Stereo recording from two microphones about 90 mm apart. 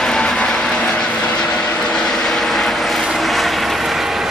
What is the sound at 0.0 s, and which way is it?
Vehicle, 5° left (ahead or behind).